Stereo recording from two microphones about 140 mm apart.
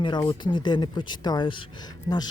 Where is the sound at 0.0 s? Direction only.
35° left (ahead or behind).